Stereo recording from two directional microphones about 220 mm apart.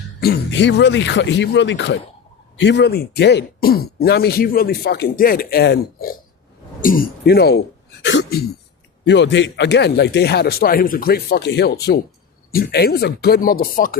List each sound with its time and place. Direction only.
0.2 s speech: 50° left (ahead or behind)
8.0 s throat clearing: 55° left (ahead or behind)
9.0 s speech: 55° left (ahead or behind)